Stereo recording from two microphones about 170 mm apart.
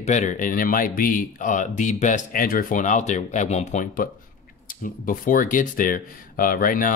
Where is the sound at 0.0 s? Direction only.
45° left (ahead or behind).